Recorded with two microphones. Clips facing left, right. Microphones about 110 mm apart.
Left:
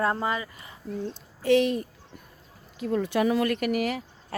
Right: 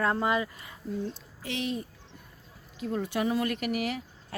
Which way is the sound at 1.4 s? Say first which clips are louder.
Left 11 dB; 55° left (ahead or behind).